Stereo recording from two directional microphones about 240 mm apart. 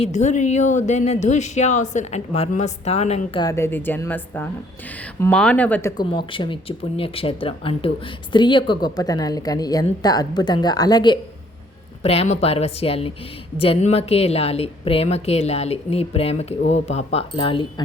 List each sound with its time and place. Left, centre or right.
0.0 s speech: left
3.4 s speech: centre
6.0 s speech: left